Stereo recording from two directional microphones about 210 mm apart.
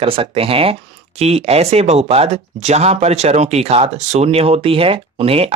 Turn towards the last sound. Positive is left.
turn(degrees=-25)  # may be behind; listen again after turning